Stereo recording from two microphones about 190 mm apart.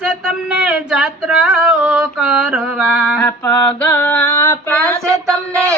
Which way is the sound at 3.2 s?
10° left (ahead or behind).